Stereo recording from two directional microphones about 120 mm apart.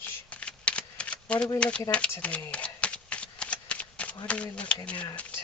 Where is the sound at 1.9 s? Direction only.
10° left (ahead or behind).